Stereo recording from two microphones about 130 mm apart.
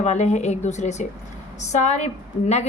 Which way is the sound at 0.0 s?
60° left (ahead or behind).